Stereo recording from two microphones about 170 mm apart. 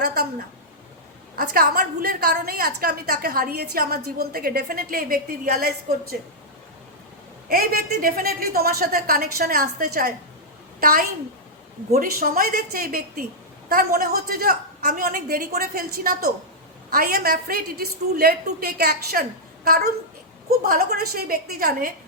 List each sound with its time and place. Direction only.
0.0 s a sound: 65° right (ahead or behind)
1.4 s a woman's voice: 60° right (ahead or behind)
7.5 s a woman's voice: 60° right (ahead or behind)